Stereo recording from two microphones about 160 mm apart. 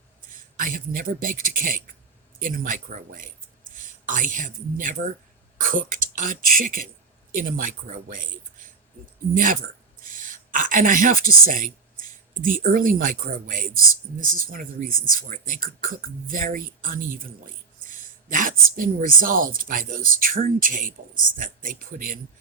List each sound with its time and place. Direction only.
0.6 s speech: 60° right (ahead or behind)